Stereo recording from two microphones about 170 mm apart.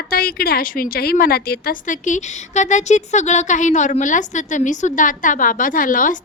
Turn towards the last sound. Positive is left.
turn(degrees=50)  # may be behind; listen again after turning